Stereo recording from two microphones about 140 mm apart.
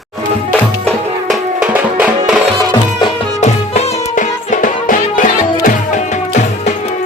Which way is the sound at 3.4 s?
50° left (ahead or behind).